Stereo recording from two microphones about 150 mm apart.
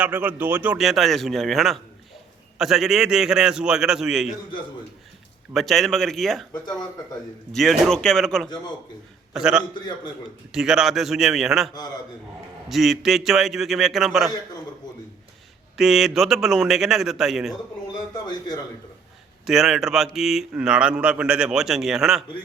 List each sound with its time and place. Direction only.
0.0 s speech: 15° right (ahead or behind)
5.5 s speech: centre (ahead or behind)
6.5 s a man's voice: 25° left (ahead or behind)
7.5 s speech: 5° left (ahead or behind)
15.8 s speech: centre (ahead or behind)
18.3 s a man's voice: 30° left (ahead or behind)
19.5 s speech: 5° right (ahead or behind)